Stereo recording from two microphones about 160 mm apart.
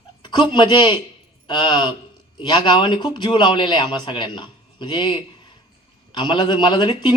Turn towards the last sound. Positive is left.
turn(degrees=30)  # may be behind; listen again after turning